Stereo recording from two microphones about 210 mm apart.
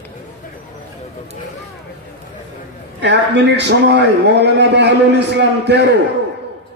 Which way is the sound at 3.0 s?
55° right (ahead or behind).